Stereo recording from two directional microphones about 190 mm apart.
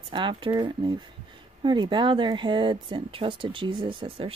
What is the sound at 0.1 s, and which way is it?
Speech, 25° right (ahead or behind).